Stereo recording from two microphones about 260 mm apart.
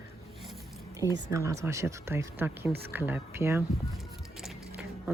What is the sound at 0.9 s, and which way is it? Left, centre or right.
Speech, centre.